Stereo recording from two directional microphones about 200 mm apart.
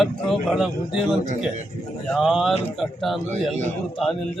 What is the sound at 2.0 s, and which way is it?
A man's voice, centre (ahead or behind).